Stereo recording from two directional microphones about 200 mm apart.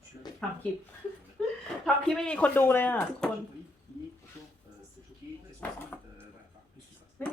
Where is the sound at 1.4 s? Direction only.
5° left (ahead or behind).